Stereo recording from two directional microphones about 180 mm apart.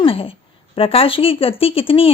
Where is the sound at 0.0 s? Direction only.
30° left (ahead or behind).